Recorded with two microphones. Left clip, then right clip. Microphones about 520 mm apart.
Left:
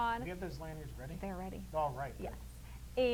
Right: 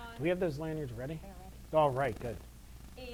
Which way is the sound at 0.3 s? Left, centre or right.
Right.